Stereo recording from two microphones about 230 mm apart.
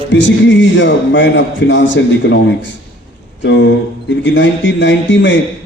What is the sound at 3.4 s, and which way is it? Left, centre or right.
A man's voice, left.